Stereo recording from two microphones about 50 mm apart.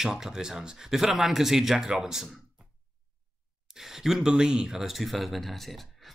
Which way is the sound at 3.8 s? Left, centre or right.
Centre.